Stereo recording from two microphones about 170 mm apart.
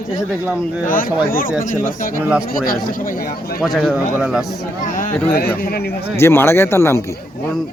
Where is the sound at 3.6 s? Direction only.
Centre (ahead or behind).